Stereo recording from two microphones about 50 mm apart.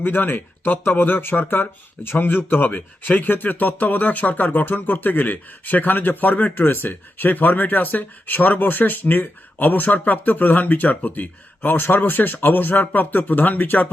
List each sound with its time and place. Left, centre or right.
0.0 s speech: left